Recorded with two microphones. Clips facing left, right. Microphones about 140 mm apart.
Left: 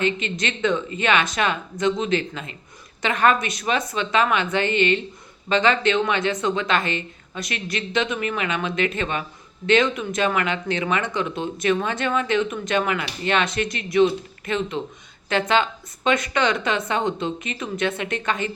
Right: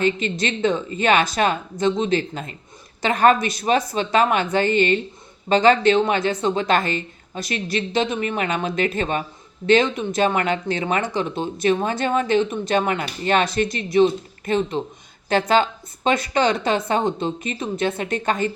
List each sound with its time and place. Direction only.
0.0 s speech: 35° right (ahead or behind)